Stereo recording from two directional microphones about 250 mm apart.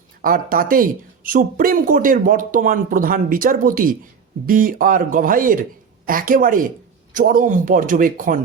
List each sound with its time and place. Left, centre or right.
0.2 s speech: right